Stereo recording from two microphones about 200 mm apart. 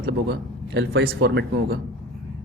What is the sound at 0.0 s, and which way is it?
A man's voice, 60° right (ahead or behind).